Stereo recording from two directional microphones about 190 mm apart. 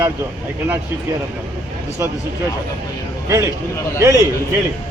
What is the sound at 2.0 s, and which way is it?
Speech, 15° right (ahead or behind).